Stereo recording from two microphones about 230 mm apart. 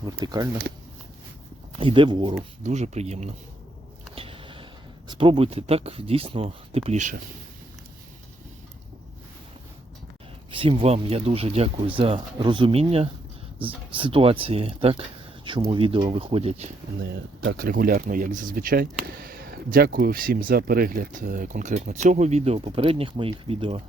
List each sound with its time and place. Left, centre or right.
0.0 s speech: centre
0.7 s speech: right
1.7 s speech: right
4.1 s a sound: right
5.0 s speech: right
10.5 s speech: right
17.0 s speech: right